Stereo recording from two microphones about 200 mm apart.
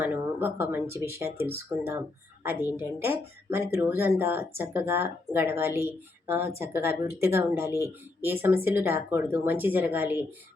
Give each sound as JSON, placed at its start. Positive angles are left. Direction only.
{"t": 0.0, "sound": "speech", "side_deg": -10}